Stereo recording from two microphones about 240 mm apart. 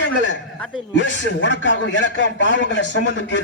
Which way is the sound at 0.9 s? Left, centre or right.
Left.